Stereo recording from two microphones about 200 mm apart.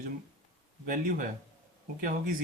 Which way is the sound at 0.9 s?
45° right (ahead or behind).